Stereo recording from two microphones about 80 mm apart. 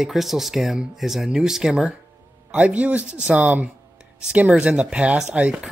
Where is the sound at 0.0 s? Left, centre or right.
Centre.